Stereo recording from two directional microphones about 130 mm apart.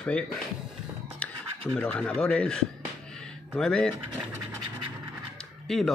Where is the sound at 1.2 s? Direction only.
10° left (ahead or behind).